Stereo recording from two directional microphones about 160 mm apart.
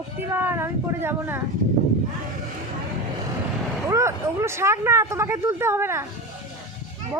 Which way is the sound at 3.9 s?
20° right (ahead or behind).